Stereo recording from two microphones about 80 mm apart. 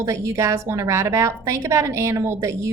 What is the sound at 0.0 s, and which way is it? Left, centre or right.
A woman's voice, right.